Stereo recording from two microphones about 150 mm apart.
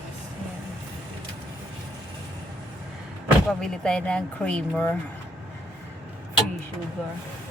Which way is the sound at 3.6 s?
5° left (ahead or behind).